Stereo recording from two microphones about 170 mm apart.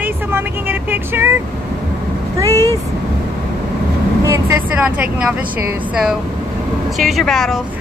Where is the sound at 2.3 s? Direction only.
20° right (ahead or behind).